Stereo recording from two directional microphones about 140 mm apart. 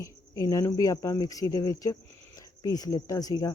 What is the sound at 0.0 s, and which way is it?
Speech, 25° left (ahead or behind).